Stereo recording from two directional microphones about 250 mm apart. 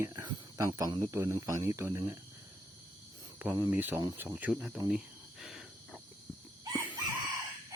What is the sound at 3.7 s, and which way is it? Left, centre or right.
Speech, centre.